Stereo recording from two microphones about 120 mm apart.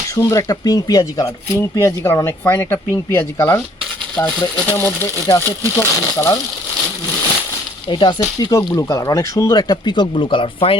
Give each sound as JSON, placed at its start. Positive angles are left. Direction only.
{"t": 0.2, "sound": "speech", "side_deg": 30}
{"t": 7.9, "sound": "speech", "side_deg": 40}